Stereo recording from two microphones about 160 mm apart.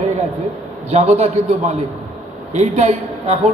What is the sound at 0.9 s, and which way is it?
A man's voice, 40° right (ahead or behind).